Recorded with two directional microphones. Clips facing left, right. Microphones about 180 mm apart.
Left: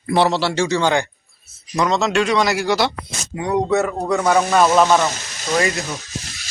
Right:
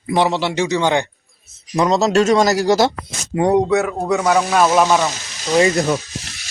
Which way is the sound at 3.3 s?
65° right (ahead or behind).